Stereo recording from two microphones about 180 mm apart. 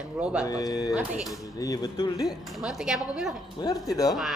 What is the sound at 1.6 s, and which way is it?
Speech, 20° left (ahead or behind).